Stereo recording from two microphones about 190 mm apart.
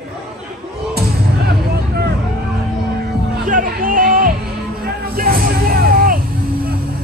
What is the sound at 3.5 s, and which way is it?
Music, 45° right (ahead or behind).